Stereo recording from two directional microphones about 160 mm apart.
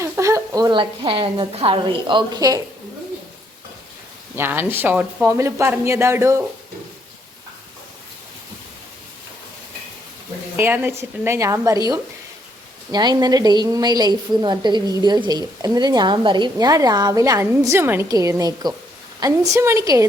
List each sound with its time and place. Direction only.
0.0 s a woman's voice: 20° right (ahead or behind)
4.4 s speech: 15° right (ahead or behind)
10.6 s speech: 10° right (ahead or behind)
12.9 s a woman's voice: 25° right (ahead or behind)